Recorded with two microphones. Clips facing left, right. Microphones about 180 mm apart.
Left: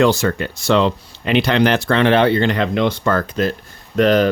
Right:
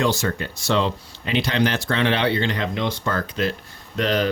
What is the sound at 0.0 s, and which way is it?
Speech, 65° left (ahead or behind).